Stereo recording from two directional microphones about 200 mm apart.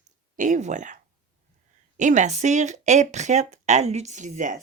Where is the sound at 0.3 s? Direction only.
40° right (ahead or behind).